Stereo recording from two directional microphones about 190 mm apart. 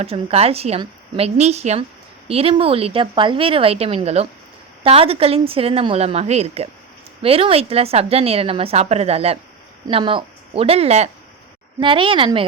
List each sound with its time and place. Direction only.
0.0 s speech: 30° right (ahead or behind)